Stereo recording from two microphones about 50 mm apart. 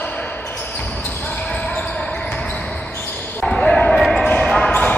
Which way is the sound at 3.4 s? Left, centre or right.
Centre.